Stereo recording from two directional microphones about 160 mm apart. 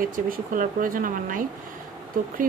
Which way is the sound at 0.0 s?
60° right (ahead or behind).